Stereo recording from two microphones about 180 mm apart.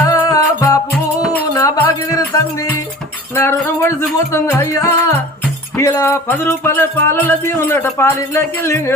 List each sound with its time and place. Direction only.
0.0 s music: 20° left (ahead or behind)